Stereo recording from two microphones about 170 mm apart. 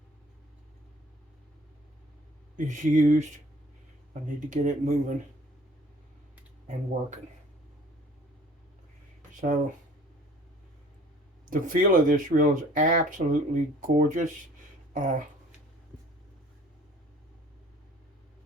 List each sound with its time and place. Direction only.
2.6 s speech: 45° right (ahead or behind)
9.3 s speech: 50° right (ahead or behind)
11.4 s speech: 50° right (ahead or behind)